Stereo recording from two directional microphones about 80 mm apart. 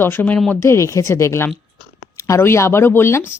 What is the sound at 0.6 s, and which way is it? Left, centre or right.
Speech, left.